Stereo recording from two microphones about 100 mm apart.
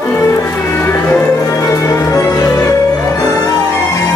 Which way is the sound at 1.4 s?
35° left (ahead or behind).